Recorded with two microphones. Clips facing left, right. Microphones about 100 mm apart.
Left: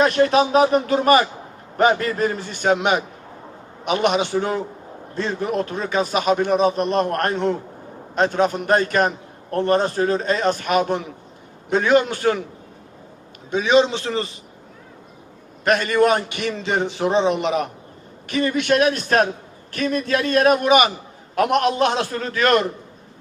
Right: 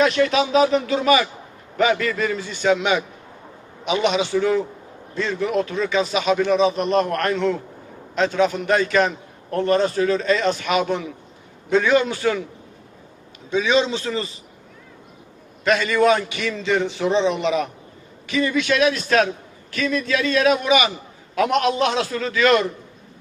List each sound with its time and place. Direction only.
0.0 s a man's voice: 40° left (ahead or behind)
13.5 s a man's voice: 45° left (ahead or behind)
15.6 s a man's voice: 50° left (ahead or behind)